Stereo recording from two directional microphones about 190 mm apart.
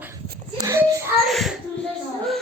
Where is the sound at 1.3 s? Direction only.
Centre (ahead or behind).